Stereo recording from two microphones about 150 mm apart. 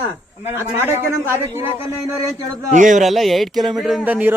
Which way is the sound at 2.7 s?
55° right (ahead or behind).